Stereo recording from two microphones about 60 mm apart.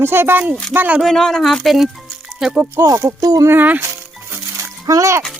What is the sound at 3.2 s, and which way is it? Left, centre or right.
Speech, right.